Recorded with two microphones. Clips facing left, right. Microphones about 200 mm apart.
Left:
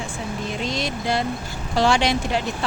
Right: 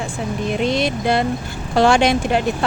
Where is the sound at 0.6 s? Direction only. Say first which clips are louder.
Right 8 dB; 60° right (ahead or behind).